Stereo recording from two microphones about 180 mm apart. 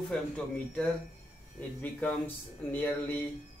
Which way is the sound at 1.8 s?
10° left (ahead or behind).